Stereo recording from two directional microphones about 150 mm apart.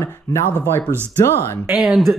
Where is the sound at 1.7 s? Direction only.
Centre (ahead or behind).